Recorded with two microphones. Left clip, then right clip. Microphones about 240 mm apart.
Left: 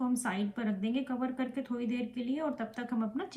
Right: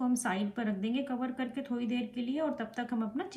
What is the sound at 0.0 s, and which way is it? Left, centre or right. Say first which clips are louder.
Speech: right 1 dB; centre.